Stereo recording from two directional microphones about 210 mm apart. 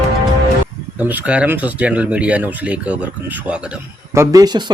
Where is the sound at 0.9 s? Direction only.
10° right (ahead or behind).